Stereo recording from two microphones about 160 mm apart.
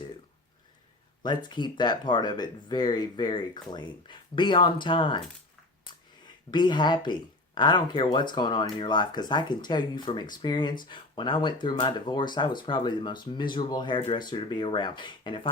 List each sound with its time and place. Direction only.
1.2 s speech: 25° left (ahead or behind)
6.5 s speech: 30° left (ahead or behind)